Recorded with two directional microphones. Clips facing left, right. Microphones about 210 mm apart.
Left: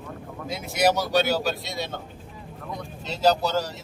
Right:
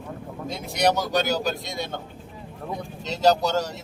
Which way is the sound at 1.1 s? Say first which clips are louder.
Left 1 dB; 45° right (ahead or behind).